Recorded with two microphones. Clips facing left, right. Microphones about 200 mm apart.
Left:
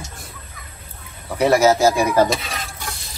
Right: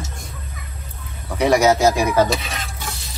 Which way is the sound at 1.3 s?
5° left (ahead or behind).